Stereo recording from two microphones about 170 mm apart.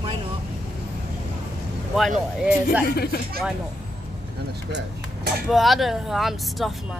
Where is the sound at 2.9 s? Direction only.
65° left (ahead or behind).